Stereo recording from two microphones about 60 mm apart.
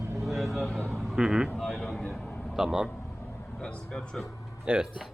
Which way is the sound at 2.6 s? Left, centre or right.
Centre.